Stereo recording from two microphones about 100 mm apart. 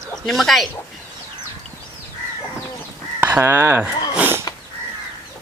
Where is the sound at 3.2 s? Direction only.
20° right (ahead or behind).